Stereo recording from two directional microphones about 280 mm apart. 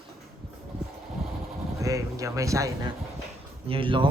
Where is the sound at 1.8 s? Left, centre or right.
Centre.